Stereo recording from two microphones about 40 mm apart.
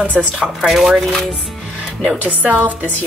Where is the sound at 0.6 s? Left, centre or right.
Centre.